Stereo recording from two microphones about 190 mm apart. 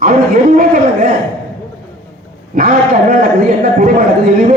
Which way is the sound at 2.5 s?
50° right (ahead or behind).